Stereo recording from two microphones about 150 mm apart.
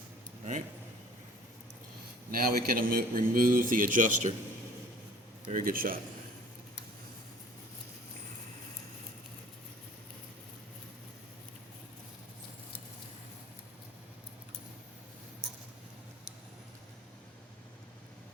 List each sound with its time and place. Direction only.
2.3 s speech: 75° right (ahead or behind)
5.5 s speech: 65° right (ahead or behind)